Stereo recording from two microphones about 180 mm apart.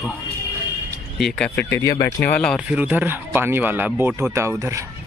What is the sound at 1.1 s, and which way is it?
Speech, 5° left (ahead or behind).